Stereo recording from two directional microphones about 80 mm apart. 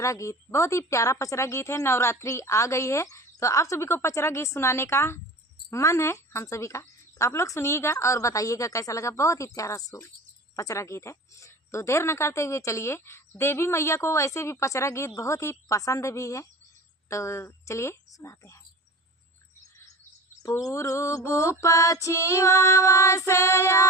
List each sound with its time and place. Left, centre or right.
0.0 s speech: left
20.4 s speech: left